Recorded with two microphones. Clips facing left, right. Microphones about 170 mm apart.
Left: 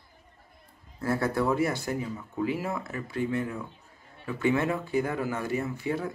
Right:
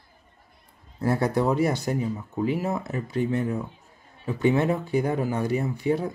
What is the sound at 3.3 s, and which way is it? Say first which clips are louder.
Speech: right 4 dB; 40° right (ahead or behind).